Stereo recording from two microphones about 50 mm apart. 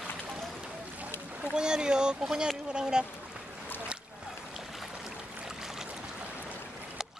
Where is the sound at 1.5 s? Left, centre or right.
Centre.